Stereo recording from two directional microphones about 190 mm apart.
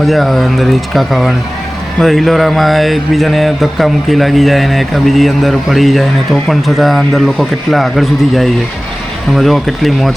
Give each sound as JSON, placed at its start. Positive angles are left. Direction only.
{"t": 0.0, "sound": "speech", "side_deg": 0}